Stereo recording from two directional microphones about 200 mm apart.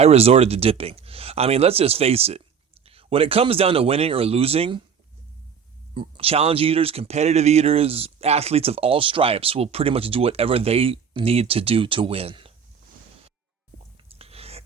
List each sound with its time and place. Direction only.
0.0 s speech: 30° right (ahead or behind)
5.9 s speech: 25° right (ahead or behind)
14.2 s whispering: 30° right (ahead or behind)